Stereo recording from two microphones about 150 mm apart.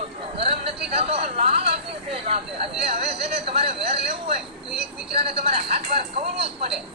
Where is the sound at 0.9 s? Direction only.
40° right (ahead or behind).